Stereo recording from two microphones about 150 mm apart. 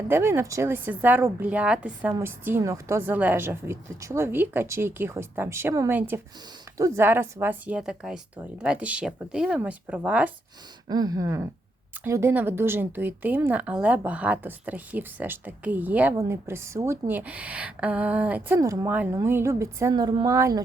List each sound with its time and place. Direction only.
0.1 s speech: 15° right (ahead or behind)
10.8 s a woman's voice: 25° right (ahead or behind)